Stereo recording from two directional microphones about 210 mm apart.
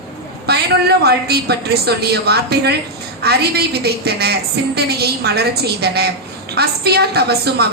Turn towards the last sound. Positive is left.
turn(degrees=-50)  # may be behind; listen again after turning